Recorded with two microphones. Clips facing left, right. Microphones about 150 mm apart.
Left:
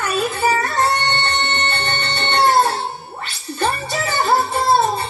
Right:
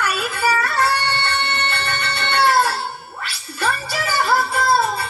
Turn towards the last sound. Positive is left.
turn(degrees=30)  # may be behind; listen again after turning